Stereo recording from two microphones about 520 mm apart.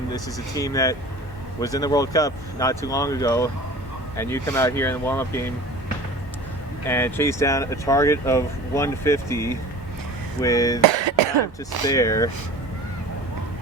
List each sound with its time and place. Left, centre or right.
0.1 s speech: centre
6.8 s speech: centre
10.8 s speech: right
11.9 s speech: centre